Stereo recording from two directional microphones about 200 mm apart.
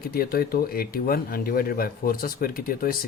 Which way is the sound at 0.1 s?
50° left (ahead or behind).